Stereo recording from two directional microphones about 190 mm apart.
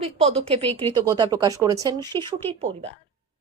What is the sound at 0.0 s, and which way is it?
Speech, 30° right (ahead or behind).